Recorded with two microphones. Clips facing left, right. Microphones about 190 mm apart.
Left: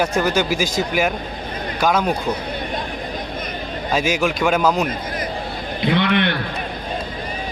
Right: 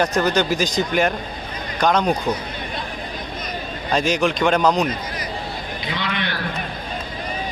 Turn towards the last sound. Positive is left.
turn(degrees=60)  # may be behind; listen again after turning